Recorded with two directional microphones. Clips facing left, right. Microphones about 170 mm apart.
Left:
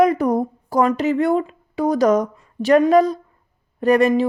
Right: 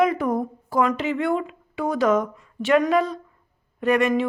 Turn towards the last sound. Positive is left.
turn(degrees=35)  # may be behind; listen again after turning